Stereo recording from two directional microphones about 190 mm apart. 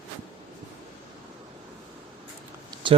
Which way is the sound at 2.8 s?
25° right (ahead or behind).